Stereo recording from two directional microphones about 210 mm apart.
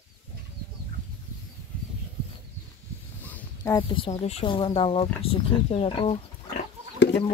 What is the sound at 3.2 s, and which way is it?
Speech, 10° left (ahead or behind).